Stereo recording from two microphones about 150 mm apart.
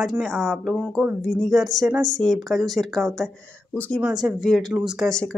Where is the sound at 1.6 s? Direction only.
25° right (ahead or behind).